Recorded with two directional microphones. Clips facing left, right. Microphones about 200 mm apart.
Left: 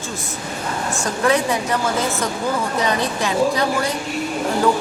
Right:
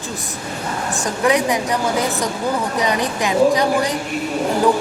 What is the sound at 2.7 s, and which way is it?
A woman's voice, 15° right (ahead or behind).